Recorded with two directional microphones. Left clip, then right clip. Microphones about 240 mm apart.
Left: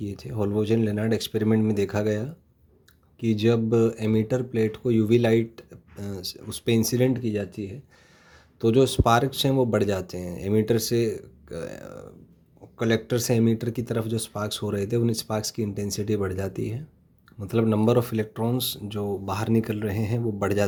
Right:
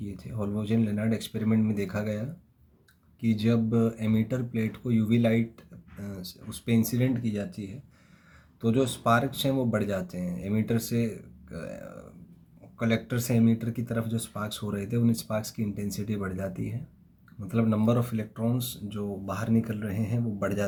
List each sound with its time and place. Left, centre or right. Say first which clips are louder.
0.0 s speech: left 7 dB; left
8.6 s speech: left 6 dB; left